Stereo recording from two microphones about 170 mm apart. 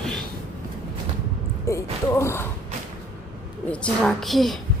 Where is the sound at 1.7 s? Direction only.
15° left (ahead or behind).